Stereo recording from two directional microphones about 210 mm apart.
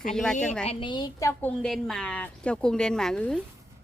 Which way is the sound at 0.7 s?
25° left (ahead or behind).